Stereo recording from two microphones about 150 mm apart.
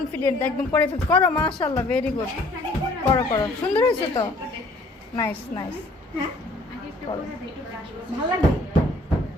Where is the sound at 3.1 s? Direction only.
15° left (ahead or behind).